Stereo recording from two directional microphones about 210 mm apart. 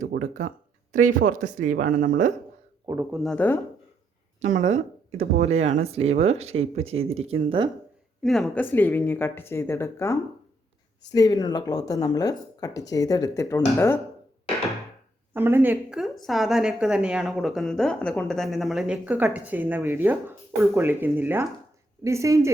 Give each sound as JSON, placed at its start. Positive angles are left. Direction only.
{"t": 0.2, "sound": "speech", "side_deg": -35}
{"t": 2.8, "sound": "a woman's voice", "side_deg": -10}
{"t": 4.4, "sound": "speech", "side_deg": -35}
{"t": 8.2, "sound": "speech", "side_deg": 0}
{"t": 15.3, "sound": "a woman's voice", "side_deg": -10}